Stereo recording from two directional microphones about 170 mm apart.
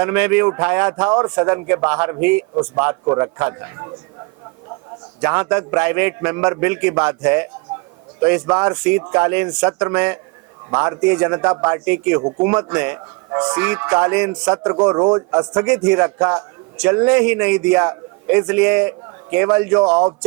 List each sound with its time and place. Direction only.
0.0 s a man's voice: 10° right (ahead or behind)
5.2 s a man's voice: 10° right (ahead or behind)
15.6 s a man's voice: 10° right (ahead or behind)